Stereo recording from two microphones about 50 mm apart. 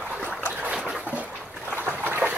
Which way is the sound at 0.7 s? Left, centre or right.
Centre.